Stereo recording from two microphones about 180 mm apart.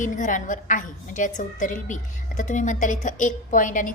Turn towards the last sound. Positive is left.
turn(degrees=45)  # may be behind; listen again after turning